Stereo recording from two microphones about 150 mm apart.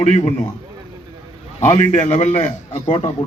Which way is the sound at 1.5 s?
50° left (ahead or behind).